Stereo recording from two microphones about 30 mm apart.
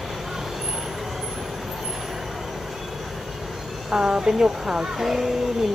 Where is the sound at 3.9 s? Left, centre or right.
Right.